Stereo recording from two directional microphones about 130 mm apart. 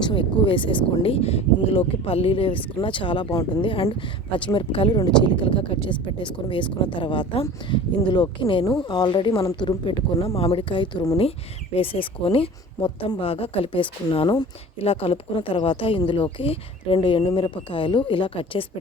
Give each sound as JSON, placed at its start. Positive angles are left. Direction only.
{"t": 0.0, "sound": "speech", "side_deg": 40}
{"t": 9.4, "sound": "a woman's voice", "side_deg": 25}
{"t": 9.9, "sound": "speech", "side_deg": 40}
{"t": 14.8, "sound": "speech", "side_deg": 50}